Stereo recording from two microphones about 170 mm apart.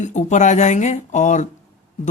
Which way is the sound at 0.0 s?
45° left (ahead or behind).